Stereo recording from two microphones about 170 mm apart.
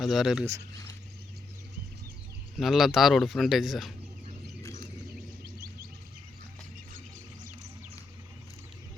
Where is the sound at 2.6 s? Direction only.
Centre (ahead or behind).